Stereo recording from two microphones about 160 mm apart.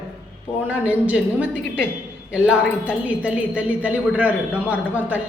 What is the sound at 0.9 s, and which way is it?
A woman's voice, 5° right (ahead or behind).